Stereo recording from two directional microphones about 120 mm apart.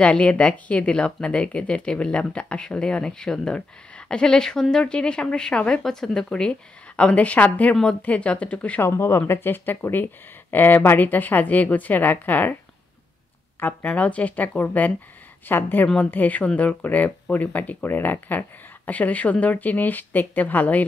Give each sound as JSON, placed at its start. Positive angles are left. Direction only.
{"t": 0.0, "sound": "speech", "side_deg": 10}
{"t": 8.8, "sound": "speech", "side_deg": 20}
{"t": 13.6, "sound": "speech", "side_deg": 15}